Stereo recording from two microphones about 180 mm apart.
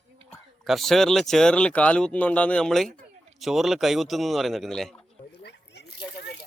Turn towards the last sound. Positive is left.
turn(degrees=70)  # may be behind; listen again after turning